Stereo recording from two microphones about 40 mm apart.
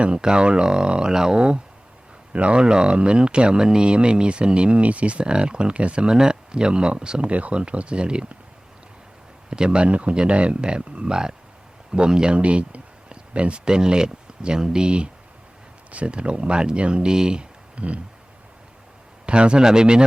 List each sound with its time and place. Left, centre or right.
0.0 s speech: right
9.5 s speech: right
12.4 s a sound: right
13.7 s speech: centre
19.2 s speech: right